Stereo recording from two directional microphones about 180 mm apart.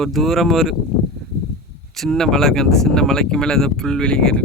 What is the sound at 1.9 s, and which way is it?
Speech, centre (ahead or behind).